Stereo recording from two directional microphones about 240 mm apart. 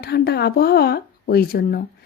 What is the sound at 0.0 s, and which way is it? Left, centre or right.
Speech, left.